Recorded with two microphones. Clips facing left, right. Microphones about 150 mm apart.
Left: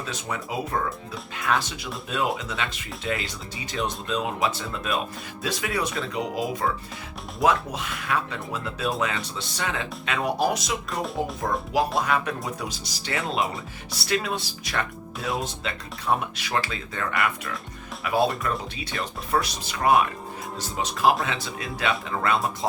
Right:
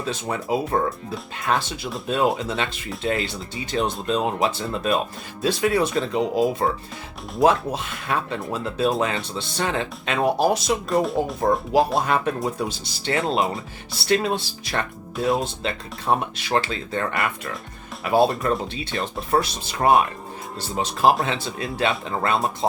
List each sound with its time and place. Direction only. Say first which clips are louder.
0.1 s speech: right 8 dB; 30° right (ahead or behind)
10.9 s speech: right 7 dB; centre (ahead or behind)
12.0 s speech: right 4 dB; 30° right (ahead or behind)